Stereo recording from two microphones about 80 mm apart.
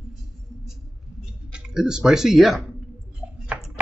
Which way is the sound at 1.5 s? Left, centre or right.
Centre.